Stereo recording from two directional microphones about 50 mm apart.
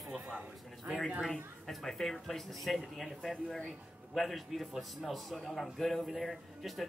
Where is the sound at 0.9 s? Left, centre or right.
Right.